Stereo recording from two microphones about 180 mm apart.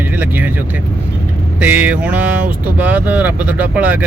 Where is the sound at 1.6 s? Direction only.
10° right (ahead or behind).